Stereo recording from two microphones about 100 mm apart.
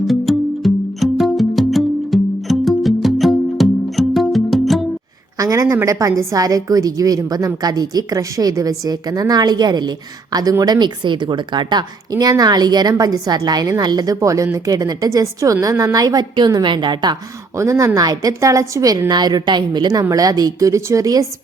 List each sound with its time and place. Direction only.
0.1 s music: centre (ahead or behind)
5.4 s a woman's voice: 35° right (ahead or behind)
17.6 s a woman's voice: 30° right (ahead or behind)